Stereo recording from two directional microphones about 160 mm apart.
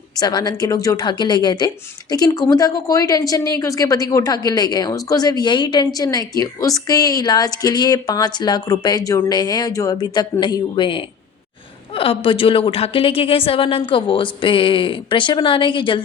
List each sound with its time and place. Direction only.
0.2 s a woman's voice: 25° left (ahead or behind)